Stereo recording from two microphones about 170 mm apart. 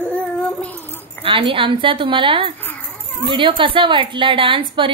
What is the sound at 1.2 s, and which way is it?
A woman's voice, 30° right (ahead or behind).